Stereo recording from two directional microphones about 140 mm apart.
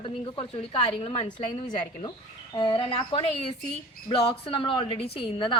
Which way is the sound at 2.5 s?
35° left (ahead or behind).